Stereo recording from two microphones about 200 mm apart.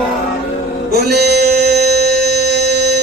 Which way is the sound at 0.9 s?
55° right (ahead or behind).